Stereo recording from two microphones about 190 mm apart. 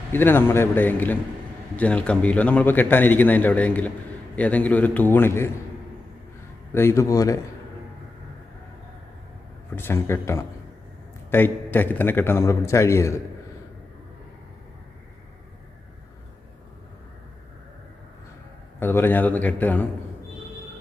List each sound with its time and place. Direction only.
0.1 s a man's voice: 10° left (ahead or behind)
6.7 s a man's voice: 15° left (ahead or behind)
9.7 s a man's voice: 15° left (ahead or behind)
18.8 s a man's voice: 10° left (ahead or behind)